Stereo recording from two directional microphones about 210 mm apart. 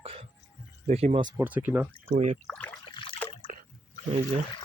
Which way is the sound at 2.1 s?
35° right (ahead or behind).